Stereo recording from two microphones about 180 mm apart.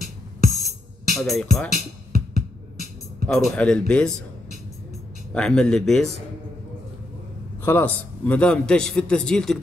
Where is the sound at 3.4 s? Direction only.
5° left (ahead or behind).